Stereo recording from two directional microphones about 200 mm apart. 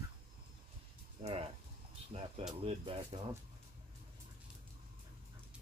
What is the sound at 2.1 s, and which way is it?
Speech, 30° right (ahead or behind).